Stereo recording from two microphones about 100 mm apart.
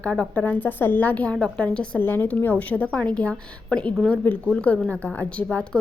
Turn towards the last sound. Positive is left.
turn(degrees=10)  # may be behind; listen again after turning